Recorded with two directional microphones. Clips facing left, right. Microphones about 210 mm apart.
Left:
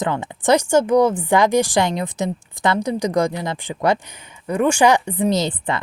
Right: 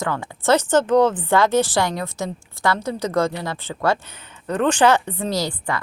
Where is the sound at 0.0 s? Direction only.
20° left (ahead or behind).